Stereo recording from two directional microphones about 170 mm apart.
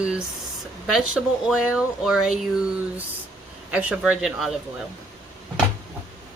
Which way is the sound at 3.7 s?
5° right (ahead or behind).